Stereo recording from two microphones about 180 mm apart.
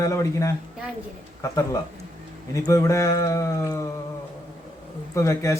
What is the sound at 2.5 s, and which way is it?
Speech, 20° left (ahead or behind).